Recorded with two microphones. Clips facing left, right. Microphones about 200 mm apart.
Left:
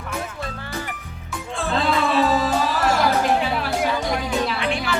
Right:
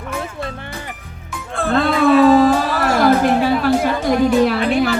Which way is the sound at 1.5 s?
55° right (ahead or behind).